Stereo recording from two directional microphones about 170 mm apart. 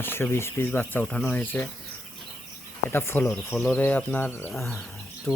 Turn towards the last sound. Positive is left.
turn(degrees=5)  # may be behind; listen again after turning